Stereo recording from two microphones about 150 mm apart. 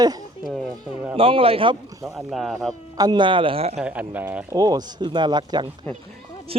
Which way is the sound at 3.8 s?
10° right (ahead or behind).